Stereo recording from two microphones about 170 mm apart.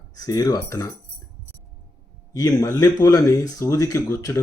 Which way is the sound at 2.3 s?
20° left (ahead or behind).